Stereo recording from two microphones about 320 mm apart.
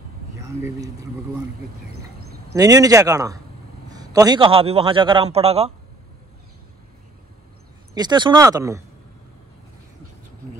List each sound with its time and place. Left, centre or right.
2.5 s a man's voice: centre
7.9 s a man's voice: centre